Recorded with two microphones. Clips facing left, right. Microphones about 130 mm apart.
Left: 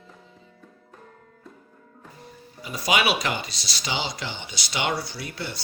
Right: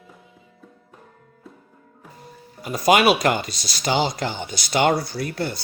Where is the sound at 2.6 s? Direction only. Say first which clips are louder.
Right 7 dB; 50° right (ahead or behind).